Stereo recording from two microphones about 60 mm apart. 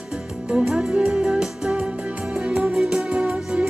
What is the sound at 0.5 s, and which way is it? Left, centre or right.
Music, centre.